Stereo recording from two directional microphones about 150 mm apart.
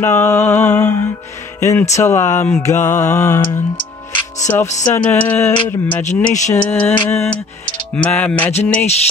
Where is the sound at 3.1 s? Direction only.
20° left (ahead or behind).